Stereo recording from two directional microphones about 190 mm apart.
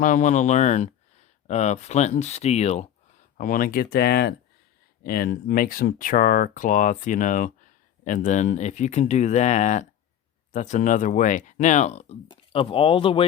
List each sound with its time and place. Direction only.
0.0 s speech: 40° left (ahead or behind)
3.3 s speech: 45° left (ahead or behind); by 13.2 s 30° left (ahead or behind)